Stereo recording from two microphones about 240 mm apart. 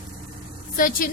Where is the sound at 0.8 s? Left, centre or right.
Left.